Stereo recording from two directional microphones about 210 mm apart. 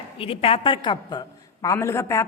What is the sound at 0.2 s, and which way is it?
A woman's voice, 25° left (ahead or behind).